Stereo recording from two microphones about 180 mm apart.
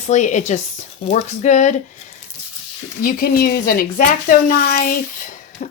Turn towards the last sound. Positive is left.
turn(degrees=50)  # may be behind; listen again after turning